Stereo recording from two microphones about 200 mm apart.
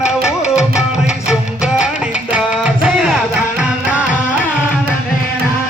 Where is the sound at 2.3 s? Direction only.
5° right (ahead or behind).